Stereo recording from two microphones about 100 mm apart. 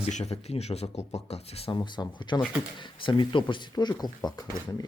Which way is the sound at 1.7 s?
50° left (ahead or behind).